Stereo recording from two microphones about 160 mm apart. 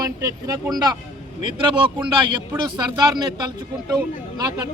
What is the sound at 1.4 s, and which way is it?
A man's voice, 30° right (ahead or behind).